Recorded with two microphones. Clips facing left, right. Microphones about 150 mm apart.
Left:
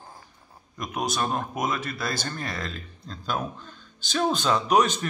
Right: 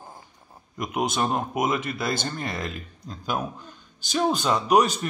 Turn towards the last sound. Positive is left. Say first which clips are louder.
# right 2 dB
turn(degrees=-10)  # may be behind; listen again after turning